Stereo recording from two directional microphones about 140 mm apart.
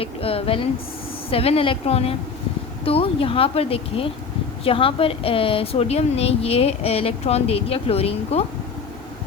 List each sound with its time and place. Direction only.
0.0 s a woman's voice: 45° left (ahead or behind)